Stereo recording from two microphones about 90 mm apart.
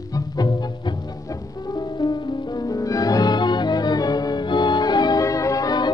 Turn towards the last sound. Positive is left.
turn(degrees=45)  # may be behind; listen again after turning